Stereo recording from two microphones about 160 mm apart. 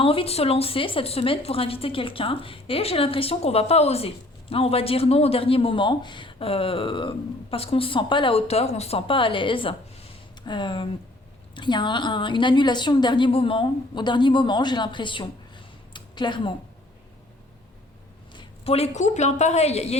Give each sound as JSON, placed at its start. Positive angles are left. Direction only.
{"t": 0.0, "sound": "a woman's voice", "side_deg": 35}
{"t": 15.9, "sound": "a sound", "side_deg": 30}
{"t": 18.3, "sound": "a woman's voice", "side_deg": 40}